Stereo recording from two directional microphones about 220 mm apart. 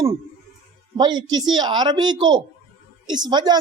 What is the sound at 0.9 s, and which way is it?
Speech, 20° right (ahead or behind).